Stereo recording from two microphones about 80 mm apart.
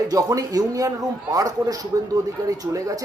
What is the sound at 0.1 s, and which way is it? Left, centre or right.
A man's voice, right.